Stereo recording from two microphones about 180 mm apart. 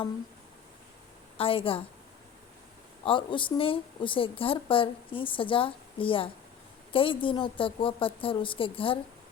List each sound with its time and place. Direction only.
1.4 s a woman's voice: 30° left (ahead or behind)
3.0 s speech: 30° left (ahead or behind)